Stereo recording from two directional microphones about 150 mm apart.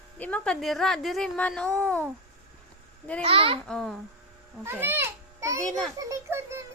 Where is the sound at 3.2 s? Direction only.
40° right (ahead or behind).